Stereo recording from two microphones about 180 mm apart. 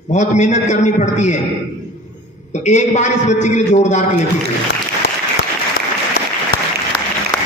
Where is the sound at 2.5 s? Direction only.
40° left (ahead or behind).